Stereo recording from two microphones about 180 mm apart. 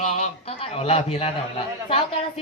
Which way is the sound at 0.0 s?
40° left (ahead or behind).